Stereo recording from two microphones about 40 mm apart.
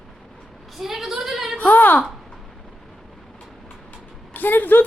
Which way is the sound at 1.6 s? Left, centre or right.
Left.